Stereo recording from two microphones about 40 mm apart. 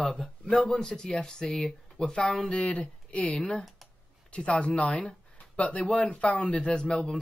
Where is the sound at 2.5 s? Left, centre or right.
Left.